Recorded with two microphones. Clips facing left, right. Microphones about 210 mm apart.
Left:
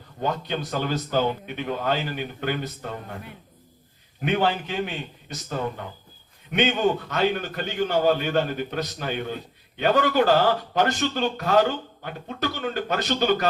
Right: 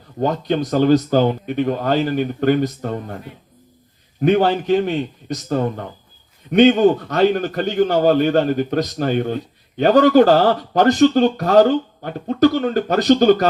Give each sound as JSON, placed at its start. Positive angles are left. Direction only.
{"t": 0.2, "sound": "a man's voice", "side_deg": -40}
{"t": 4.2, "sound": "a man's voice", "side_deg": -40}